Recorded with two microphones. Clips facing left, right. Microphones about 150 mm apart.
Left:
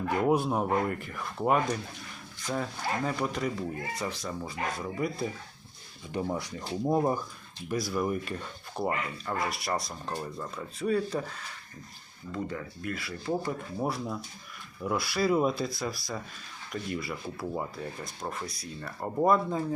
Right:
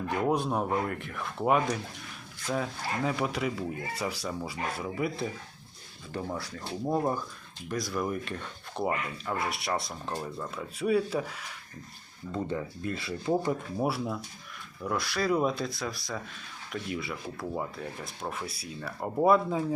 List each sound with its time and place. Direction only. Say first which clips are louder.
0.3 s speech: left 2 dB; 5° left (ahead or behind)
6.1 s speech: left 3 dB; 20° left (ahead or behind); by 11.4 s 10° right (ahead or behind)
12.3 s speech: right 3 dB; 25° right (ahead or behind)
13.7 s speech: right 2 dB; 5° right (ahead or behind)
14.8 s speech: left 2 dB; 5° left (ahead or behind)